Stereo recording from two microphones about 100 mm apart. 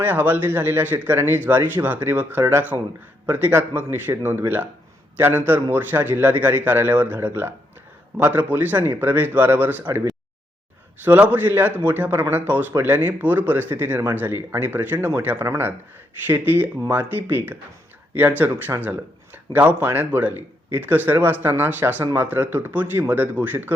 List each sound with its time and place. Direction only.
0.0 s speech: 20° right (ahead or behind)
11.0 s speech: 20° right (ahead or behind)
16.9 s speech: 20° right (ahead or behind)